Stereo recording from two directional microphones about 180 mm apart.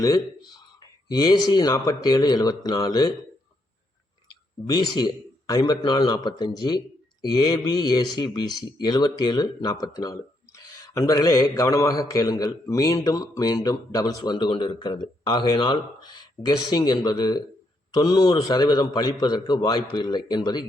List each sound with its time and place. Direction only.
0.0 s speech: 20° left (ahead or behind)
4.6 s a man's voice: 20° left (ahead or behind)